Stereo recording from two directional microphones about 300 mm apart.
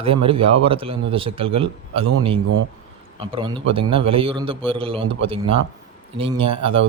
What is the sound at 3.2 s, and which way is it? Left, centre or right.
A man's voice, centre.